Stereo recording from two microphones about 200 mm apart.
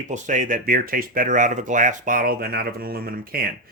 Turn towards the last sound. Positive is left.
turn(degrees=-50)  # may be behind; listen again after turning